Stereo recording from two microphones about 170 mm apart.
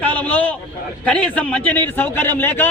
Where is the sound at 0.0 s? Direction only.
10° left (ahead or behind).